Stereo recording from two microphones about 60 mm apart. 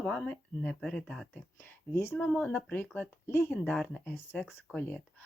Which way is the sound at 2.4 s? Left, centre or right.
Left.